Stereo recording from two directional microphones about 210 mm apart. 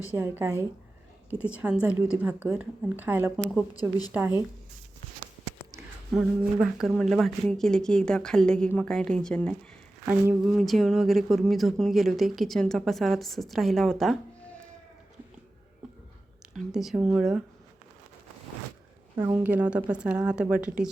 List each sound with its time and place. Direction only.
0.2 s speech: 10° right (ahead or behind)
3.3 s speech: 5° left (ahead or behind)
3.8 s a woman's voice: 20° left (ahead or behind)
6.1 s speech: centre (ahead or behind)
16.6 s speech: centre (ahead or behind)
19.2 s speech: 10° right (ahead or behind)